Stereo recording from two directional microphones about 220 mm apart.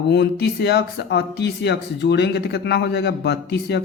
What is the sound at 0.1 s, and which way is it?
Speech, 50° left (ahead or behind).